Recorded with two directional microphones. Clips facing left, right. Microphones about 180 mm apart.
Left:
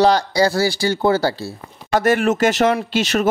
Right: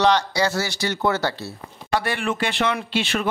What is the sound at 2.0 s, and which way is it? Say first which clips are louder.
Speech: left 9 dB; 45° left (ahead or behind).